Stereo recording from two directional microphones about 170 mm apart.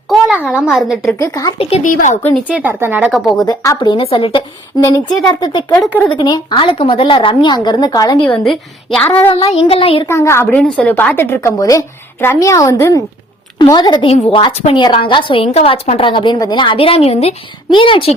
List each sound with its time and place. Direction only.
0.1 s a child's voice: 5° right (ahead or behind)
1.2 s a woman's voice: 20° left (ahead or behind)
1.5 s a woman's voice: 35° left (ahead or behind)
1.8 s a woman's voice: 50° left (ahead or behind)
2.5 s speech: 10° right (ahead or behind)
3.4 s a woman's voice: 20° left (ahead or behind)
8.4 s a woman's voice: 5° left (ahead or behind)
9.3 s a woman's voice: 35° left (ahead or behind)
10.1 s a woman's voice: 15° left (ahead or behind)